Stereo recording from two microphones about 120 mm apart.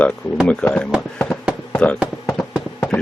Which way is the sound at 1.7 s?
10° left (ahead or behind).